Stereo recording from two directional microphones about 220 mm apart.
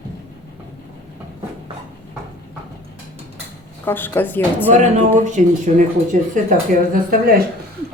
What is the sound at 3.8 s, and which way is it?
Speech, 10° left (ahead or behind).